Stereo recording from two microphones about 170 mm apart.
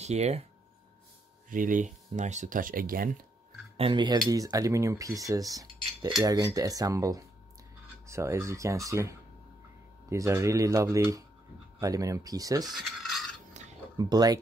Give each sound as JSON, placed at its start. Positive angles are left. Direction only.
{"t": 0.0, "sound": "speech", "side_deg": -40}
{"t": 1.5, "sound": "speech", "side_deg": -50}
{"t": 3.7, "sound": "speech", "side_deg": -30}
{"t": 12.6, "sound": "mechanisms", "side_deg": 0}
{"t": 13.9, "sound": "speech", "side_deg": -25}